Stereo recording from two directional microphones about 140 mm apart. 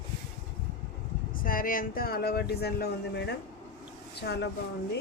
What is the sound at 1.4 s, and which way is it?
Speech, 85° left.